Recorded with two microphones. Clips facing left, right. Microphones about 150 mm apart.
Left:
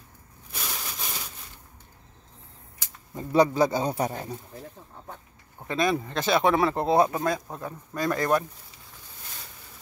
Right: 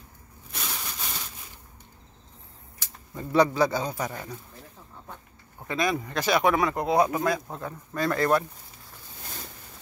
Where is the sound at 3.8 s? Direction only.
30° left (ahead or behind).